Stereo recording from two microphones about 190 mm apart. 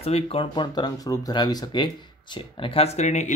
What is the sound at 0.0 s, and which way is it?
Speech, 30° left (ahead or behind).